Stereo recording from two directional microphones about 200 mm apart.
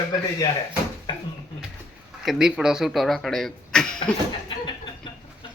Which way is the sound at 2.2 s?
5° right (ahead or behind).